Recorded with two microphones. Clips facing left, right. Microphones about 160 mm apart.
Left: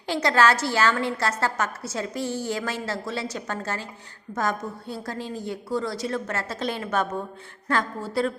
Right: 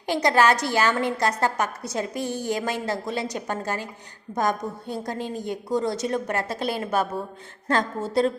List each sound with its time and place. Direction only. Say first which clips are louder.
0.1 s a woman's voice: right 1 dB; 15° right (ahead or behind)